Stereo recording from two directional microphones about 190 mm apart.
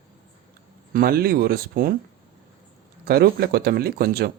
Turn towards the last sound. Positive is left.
turn(degrees=-55)  # may be behind; listen again after turning